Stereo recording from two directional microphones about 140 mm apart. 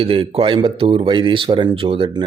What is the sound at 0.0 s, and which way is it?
A man's voice, 40° right (ahead or behind).